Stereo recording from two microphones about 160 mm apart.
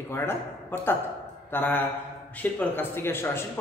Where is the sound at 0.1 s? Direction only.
15° left (ahead or behind).